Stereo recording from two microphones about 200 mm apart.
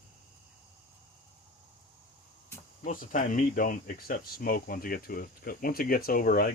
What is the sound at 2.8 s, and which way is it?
Speech, 40° left (ahead or behind).